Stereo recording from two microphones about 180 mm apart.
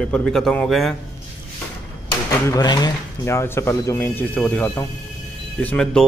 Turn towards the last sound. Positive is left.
turn(degrees=5)  # may be behind; listen again after turning